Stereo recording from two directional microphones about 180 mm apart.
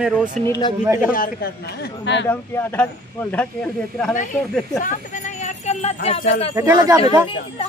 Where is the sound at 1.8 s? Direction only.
75° left (ahead or behind).